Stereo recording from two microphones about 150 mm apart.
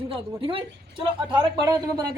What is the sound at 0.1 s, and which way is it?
Speech, 40° right (ahead or behind).